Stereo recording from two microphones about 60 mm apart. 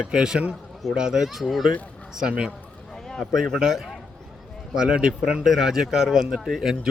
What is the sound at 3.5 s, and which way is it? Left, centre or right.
Speech, centre.